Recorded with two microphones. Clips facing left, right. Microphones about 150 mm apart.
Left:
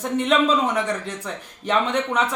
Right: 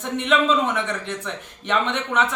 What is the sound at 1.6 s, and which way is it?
Speech, 35° left (ahead or behind).